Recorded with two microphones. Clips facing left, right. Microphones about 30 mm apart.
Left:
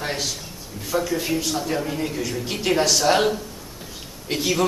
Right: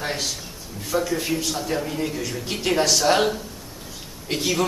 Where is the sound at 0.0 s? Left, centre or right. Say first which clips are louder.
Even; centre.